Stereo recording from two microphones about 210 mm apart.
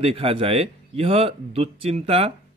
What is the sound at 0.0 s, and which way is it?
A man's voice, 25° right (ahead or behind).